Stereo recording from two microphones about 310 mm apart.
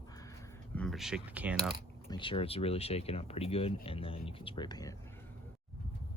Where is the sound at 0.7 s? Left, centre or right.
Centre.